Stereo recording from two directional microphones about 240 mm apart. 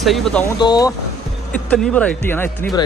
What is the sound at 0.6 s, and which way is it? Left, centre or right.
Speech, centre.